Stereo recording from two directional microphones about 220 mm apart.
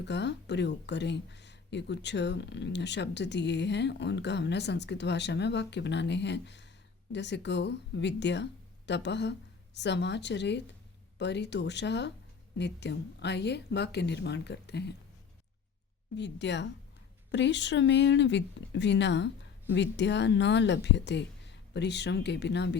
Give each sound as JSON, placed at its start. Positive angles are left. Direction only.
{"t": 0.0, "sound": "speech", "side_deg": 50}
{"t": 16.1, "sound": "speech", "side_deg": 55}